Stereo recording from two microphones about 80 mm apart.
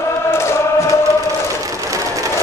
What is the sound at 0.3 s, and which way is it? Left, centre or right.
Chant, left.